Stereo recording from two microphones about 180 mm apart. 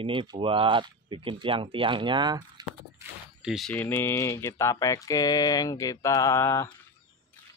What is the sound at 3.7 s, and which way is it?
Speech, 10° left (ahead or behind).